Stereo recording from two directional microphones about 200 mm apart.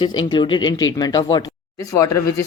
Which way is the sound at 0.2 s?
25° left (ahead or behind).